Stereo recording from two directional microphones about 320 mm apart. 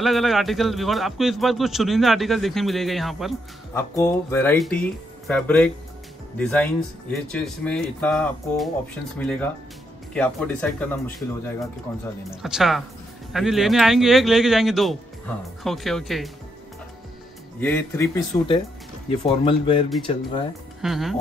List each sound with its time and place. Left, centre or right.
0.0 s a man's voice: centre
17.6 s speech: centre
20.8 s a man's voice: centre